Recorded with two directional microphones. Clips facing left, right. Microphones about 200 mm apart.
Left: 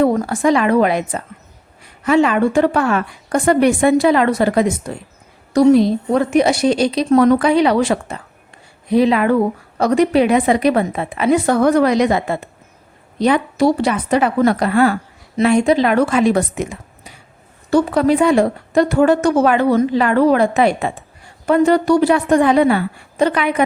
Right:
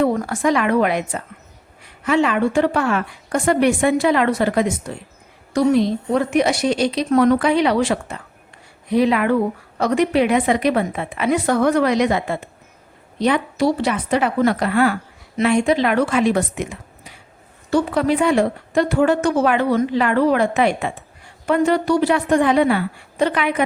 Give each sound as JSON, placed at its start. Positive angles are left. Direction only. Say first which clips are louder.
{"t": 0.0, "sound": "a woman's voice", "louder": "left 3 dB", "side_deg": 30}